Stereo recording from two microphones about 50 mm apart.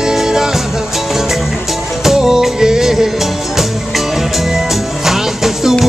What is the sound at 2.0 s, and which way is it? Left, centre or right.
Music, centre.